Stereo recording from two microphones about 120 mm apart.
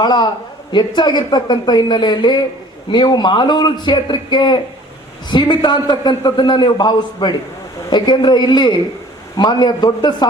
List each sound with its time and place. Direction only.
0.0 s a man's voice: 40° left (ahead or behind)